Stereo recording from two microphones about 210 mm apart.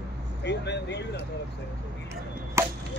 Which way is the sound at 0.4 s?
55° left (ahead or behind).